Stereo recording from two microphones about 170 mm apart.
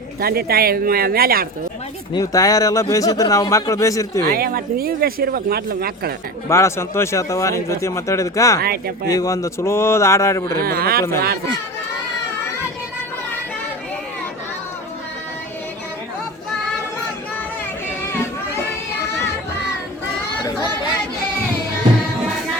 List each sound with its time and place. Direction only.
0.2 s speech: 65° right (ahead or behind)
2.1 s speech: 20° left (ahead or behind)
4.3 s speech: 60° right (ahead or behind)
6.5 s speech: 15° left (ahead or behind)
10.6 s speech: 60° right (ahead or behind)